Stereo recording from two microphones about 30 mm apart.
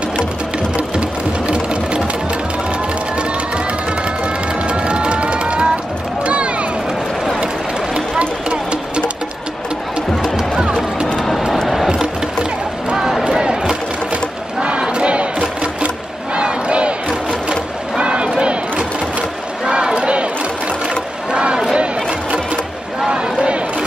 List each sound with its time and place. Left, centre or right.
1.5 s sewing machine: right
4.6 s music: right
6.2 s a sound: right
13.2 s a sound: right
14.6 s crowd: right
16.3 s battle cry: right
17.9 s battle cry: right
19.6 s crowd: right
21.3 s battle cry: right
23.0 s a sound: right